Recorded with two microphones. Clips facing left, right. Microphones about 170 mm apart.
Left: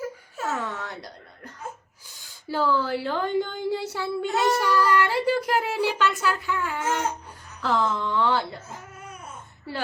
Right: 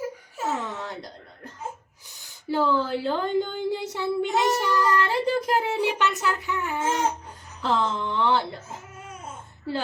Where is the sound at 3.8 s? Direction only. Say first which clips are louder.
Right 2 dB; 20° right (ahead or behind).